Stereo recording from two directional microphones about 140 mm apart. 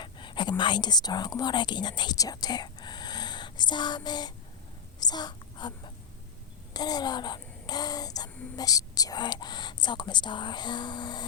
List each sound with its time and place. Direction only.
0.0 s speech: 35° left (ahead or behind)
4.9 s whispering: 30° left (ahead or behind)
6.7 s a child's voice: 30° left (ahead or behind)